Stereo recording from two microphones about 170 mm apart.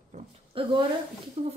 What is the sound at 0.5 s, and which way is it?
Speech, 30° right (ahead or behind).